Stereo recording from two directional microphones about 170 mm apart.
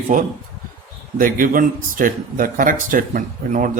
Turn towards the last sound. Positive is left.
turn(degrees=-50)  # may be behind; listen again after turning